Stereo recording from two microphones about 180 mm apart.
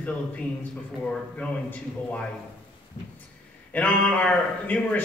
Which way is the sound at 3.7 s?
10° left (ahead or behind).